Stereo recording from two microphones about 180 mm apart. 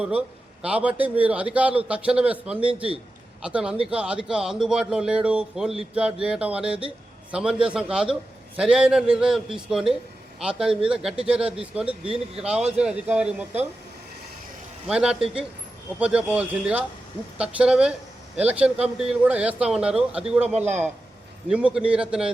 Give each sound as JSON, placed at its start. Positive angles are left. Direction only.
{"t": 0.0, "sound": "a man's voice", "side_deg": -5}
{"t": 14.8, "sound": "a man's voice", "side_deg": -5}
{"t": 20.4, "sound": "a man's voice", "side_deg": -40}
{"t": 21.5, "sound": "speech", "side_deg": -5}